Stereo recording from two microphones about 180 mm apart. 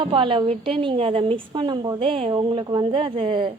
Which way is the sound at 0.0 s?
30° right (ahead or behind).